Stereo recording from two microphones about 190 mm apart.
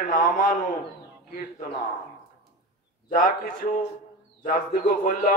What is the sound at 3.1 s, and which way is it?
A man's voice, 45° left (ahead or behind).